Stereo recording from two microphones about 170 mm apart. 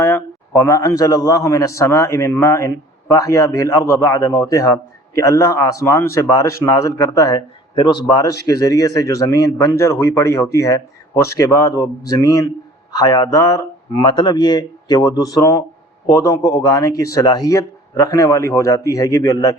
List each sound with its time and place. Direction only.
0.0 s a man's voice: 15° left (ahead or behind)